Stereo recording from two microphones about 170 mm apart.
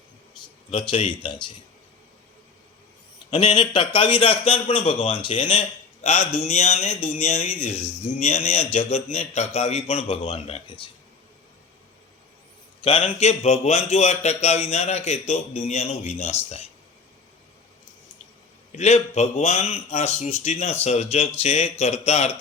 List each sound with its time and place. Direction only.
0.7 s speech: 30° left (ahead or behind)
3.3 s speech: 30° left (ahead or behind)
12.8 s speech: 35° left (ahead or behind)
18.8 s speech: 40° left (ahead or behind)